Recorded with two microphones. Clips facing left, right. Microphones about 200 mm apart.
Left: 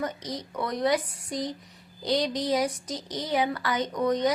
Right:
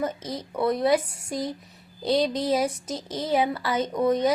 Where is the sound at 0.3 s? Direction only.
25° right (ahead or behind).